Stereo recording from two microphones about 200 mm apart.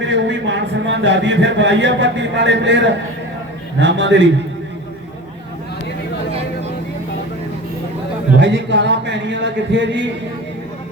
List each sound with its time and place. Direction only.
0.0 s a man's voice: 65° right (ahead or behind)
8.4 s a man's voice: 65° right (ahead or behind)